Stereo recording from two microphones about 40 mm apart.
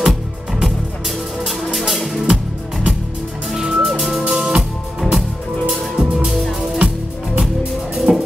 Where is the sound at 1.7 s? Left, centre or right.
Centre.